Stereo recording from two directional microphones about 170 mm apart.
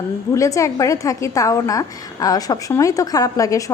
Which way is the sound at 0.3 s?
20° left (ahead or behind).